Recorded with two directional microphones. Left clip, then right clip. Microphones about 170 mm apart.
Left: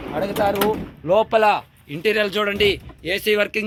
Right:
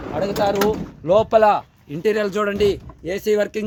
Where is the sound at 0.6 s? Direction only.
35° right (ahead or behind).